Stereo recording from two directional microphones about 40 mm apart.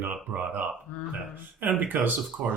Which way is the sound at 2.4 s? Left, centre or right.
Right.